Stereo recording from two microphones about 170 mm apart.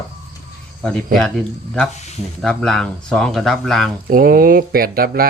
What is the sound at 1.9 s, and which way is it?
Speech, 40° left (ahead or behind).